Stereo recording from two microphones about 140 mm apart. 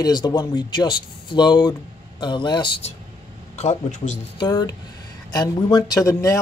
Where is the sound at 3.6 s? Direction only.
60° left (ahead or behind).